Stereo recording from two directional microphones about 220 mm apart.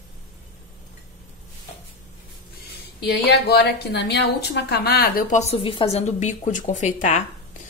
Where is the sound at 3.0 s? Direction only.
50° left (ahead or behind).